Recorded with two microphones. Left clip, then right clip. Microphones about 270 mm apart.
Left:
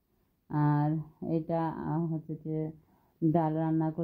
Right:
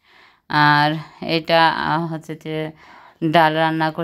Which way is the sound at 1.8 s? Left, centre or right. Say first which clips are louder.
Right 14 dB; right.